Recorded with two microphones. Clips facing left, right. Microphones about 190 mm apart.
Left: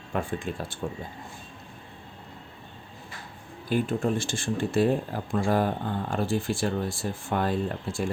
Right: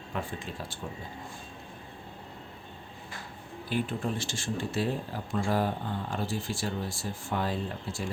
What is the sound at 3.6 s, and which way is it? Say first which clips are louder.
Speech: left 5 dB; 45° left (ahead or behind).